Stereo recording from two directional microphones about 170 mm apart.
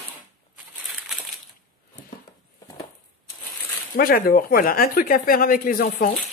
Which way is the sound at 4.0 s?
60° left (ahead or behind).